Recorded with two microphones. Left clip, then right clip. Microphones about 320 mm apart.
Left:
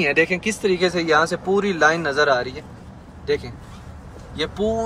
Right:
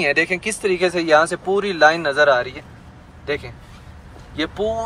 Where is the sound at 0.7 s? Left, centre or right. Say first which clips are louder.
Right 4 dB; centre.